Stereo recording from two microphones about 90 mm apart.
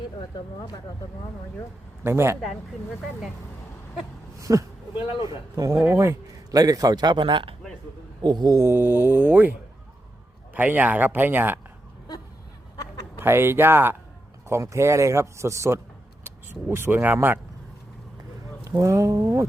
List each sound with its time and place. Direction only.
2.0 s speech: 30° right (ahead or behind)
4.4 s a sound: 35° right (ahead or behind)
5.5 s a man's voice: 40° right (ahead or behind)
5.8 s speech: 30° right (ahead or behind)
6.5 s a man's voice: 45° right (ahead or behind); by 7.5 s 65° right (ahead or behind)
8.2 s a man's voice: 55° right (ahead or behind)
8.5 s speech: 30° right (ahead or behind)
13.1 s a man's voice: 25° right (ahead or behind)
18.6 s a man's voice: 40° right (ahead or behind)